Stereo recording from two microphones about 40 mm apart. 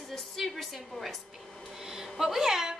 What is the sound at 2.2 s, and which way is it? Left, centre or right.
Speech, centre.